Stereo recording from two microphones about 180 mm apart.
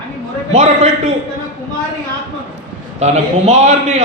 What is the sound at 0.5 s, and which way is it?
Speech, 35° right (ahead or behind).